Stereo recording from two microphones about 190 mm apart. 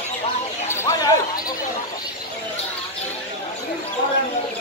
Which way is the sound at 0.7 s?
15° left (ahead or behind).